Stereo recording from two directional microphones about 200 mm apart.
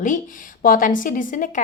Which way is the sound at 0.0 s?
40° left (ahead or behind).